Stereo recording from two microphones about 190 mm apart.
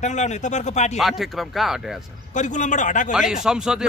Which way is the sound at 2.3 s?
40° left (ahead or behind).